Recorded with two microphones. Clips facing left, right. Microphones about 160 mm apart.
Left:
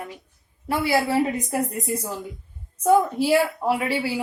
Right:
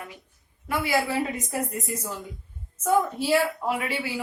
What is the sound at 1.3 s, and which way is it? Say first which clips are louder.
Speech: left 4 dB; 10° left (ahead or behind).